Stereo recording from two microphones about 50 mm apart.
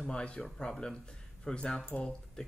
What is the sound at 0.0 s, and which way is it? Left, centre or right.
Speech, centre.